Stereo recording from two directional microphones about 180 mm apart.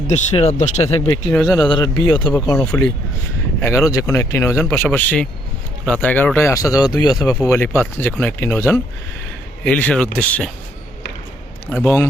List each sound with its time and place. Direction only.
0.1 s speech: 40° left (ahead or behind)
1.3 s speech: centre (ahead or behind)
1.5 s speech: 25° left (ahead or behind)
3.6 s speech: 15° left (ahead or behind)
11.7 s speech: 10° left (ahead or behind)